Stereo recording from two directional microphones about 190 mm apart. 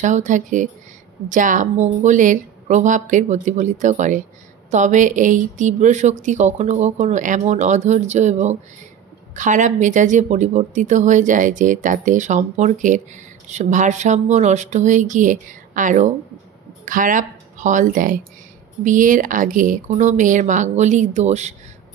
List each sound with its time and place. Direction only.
0.0 s speech: 40° right (ahead or behind)